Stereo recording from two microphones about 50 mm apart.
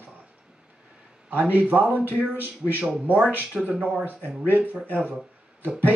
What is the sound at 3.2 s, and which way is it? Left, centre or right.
Speech, right.